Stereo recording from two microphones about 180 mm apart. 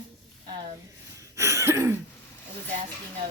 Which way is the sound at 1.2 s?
15° right (ahead or behind).